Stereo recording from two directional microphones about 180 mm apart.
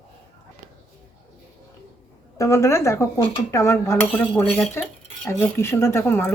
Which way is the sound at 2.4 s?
15° left (ahead or behind).